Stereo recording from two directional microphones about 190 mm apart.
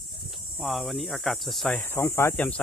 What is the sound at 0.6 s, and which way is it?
Speech, centre (ahead or behind).